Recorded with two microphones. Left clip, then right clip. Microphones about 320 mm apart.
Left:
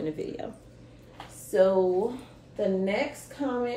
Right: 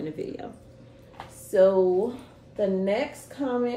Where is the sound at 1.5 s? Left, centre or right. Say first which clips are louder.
Right 3 dB; centre.